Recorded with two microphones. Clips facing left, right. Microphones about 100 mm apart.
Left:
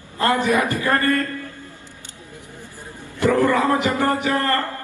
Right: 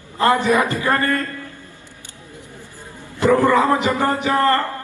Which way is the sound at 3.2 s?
20° right (ahead or behind).